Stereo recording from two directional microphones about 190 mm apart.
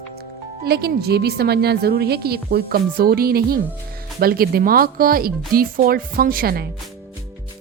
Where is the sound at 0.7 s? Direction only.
55° right (ahead or behind).